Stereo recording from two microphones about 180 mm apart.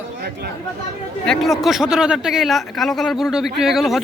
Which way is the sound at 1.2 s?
Centre (ahead or behind).